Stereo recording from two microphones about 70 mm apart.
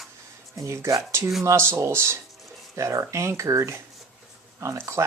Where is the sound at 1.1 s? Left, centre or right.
Right.